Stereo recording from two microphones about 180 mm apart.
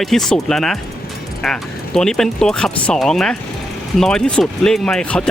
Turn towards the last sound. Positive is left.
turn(degrees=5)  # may be behind; listen again after turning